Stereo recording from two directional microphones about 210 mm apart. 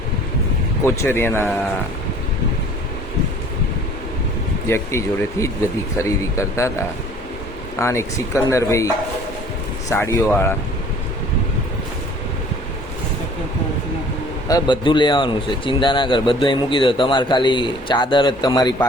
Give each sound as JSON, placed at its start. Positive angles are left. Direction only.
{"t": 0.9, "sound": "speech", "side_deg": 10}
{"t": 4.7, "sound": "speech", "side_deg": 15}
{"t": 9.9, "sound": "speech", "side_deg": 10}
{"t": 14.4, "sound": "speech", "side_deg": 20}